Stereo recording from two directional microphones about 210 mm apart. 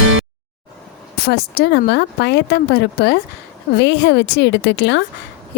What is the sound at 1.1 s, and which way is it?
A woman's voice, 50° left (ahead or behind).